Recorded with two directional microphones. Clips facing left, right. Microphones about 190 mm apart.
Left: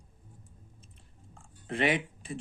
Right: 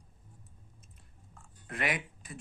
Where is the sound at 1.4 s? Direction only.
25° left (ahead or behind).